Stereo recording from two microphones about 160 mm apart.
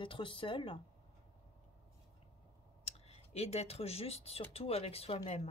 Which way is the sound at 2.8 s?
40° left (ahead or behind).